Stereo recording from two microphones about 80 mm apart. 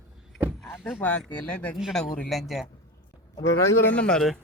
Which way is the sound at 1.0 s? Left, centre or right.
Centre.